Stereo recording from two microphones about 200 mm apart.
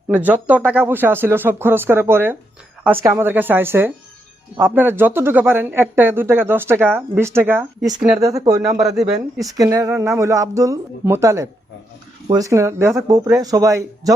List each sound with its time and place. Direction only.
0.1 s speech: 10° right (ahead or behind)
8.9 s speech: 35° right (ahead or behind)
9.4 s speech: 15° right (ahead or behind)